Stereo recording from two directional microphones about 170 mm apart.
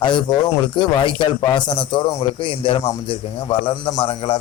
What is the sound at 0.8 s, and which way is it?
A man's voice, 25° left (ahead or behind).